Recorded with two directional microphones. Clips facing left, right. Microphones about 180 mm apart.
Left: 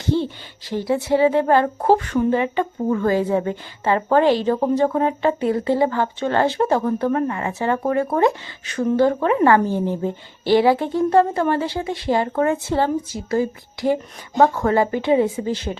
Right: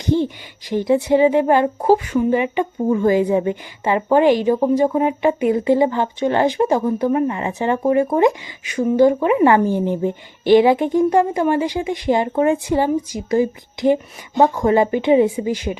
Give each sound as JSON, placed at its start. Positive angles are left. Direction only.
{"t": 0.0, "sound": "speech", "side_deg": -15}